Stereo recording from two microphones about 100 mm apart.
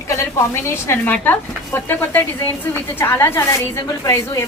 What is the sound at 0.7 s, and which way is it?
A woman's voice, 20° left (ahead or behind).